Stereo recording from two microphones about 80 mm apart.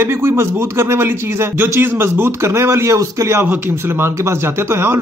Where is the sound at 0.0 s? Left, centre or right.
Right.